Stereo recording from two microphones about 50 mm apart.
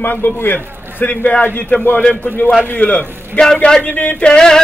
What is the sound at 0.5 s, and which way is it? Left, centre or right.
A man's voice, left.